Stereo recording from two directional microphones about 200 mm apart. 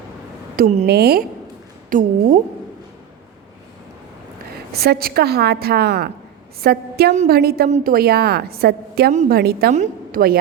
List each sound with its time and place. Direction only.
0.5 s a woman's voice: 45° right (ahead or behind)
1.9 s speech: 40° right (ahead or behind)
4.8 s a woman's voice: 50° right (ahead or behind)
9.7 s a woman's voice: 40° right (ahead or behind)